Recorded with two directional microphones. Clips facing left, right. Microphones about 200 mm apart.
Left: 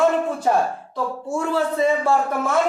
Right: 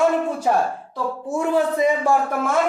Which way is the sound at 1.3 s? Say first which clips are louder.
Right 3 dB; 15° right (ahead or behind).